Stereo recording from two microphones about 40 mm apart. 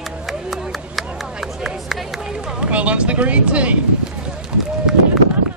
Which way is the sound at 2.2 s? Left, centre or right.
Centre.